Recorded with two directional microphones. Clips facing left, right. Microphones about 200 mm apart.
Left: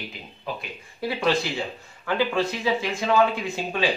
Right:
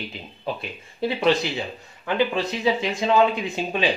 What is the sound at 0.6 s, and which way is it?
Speech, 20° right (ahead or behind).